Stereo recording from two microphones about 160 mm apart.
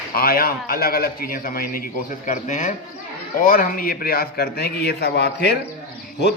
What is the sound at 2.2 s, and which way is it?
Speech, 50° left (ahead or behind).